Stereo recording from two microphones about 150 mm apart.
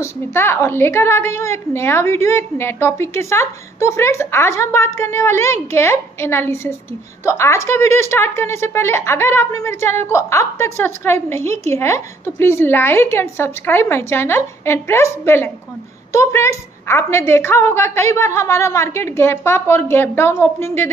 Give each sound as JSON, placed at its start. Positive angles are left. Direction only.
{"t": 0.0, "sound": "a woman's voice", "side_deg": 15}